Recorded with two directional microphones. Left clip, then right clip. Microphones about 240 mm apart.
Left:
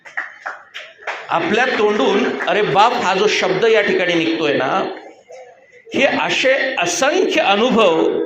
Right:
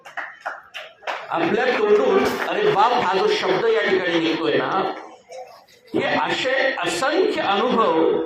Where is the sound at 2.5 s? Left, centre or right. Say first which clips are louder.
Left 5 dB; left.